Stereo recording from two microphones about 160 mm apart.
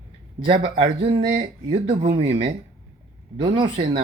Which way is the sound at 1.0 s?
35° right (ahead or behind).